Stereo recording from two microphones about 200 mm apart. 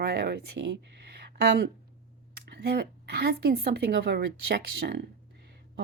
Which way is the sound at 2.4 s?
55° right (ahead or behind).